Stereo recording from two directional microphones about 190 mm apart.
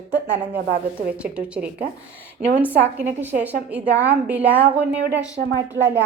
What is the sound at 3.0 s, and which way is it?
Speech, 10° right (ahead or behind).